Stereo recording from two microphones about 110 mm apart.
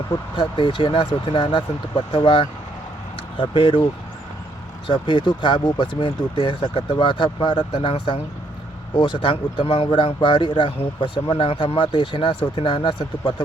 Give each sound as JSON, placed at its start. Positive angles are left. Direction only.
{"t": 0.3, "sound": "speech", "side_deg": 50}
{"t": 4.9, "sound": "speech", "side_deg": 45}
{"t": 6.1, "sound": "speech", "side_deg": 55}
{"t": 9.6, "sound": "speech", "side_deg": 60}
{"t": 10.2, "sound": "speech", "side_deg": 45}